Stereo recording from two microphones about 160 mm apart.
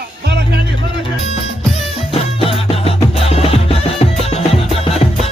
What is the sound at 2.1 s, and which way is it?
Music, 35° left (ahead or behind).